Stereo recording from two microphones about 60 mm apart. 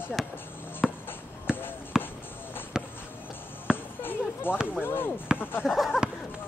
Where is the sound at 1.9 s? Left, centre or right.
Centre.